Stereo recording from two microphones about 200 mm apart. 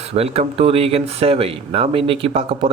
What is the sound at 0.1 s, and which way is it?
Speech, 30° right (ahead or behind).